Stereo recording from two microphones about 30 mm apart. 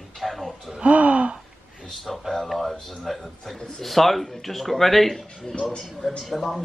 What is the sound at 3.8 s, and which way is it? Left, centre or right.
Speech, centre.